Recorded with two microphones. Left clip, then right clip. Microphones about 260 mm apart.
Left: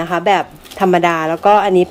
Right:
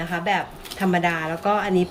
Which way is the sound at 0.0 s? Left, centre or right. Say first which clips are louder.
Left 9 dB; centre.